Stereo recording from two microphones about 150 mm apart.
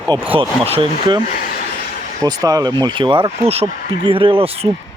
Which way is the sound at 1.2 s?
75° left (ahead or behind).